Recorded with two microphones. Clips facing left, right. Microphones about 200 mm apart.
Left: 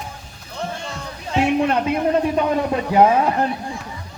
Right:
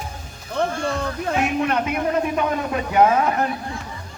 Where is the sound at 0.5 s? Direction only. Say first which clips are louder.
Right 6 dB; 55° right (ahead or behind).